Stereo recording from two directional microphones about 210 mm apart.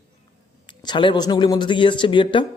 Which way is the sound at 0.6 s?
20° left (ahead or behind).